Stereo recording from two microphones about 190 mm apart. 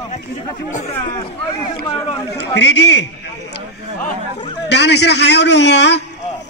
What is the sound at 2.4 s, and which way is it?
Speech, 65° left (ahead or behind).